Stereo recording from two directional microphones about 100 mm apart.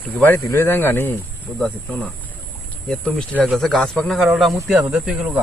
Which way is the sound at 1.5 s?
10° left (ahead or behind).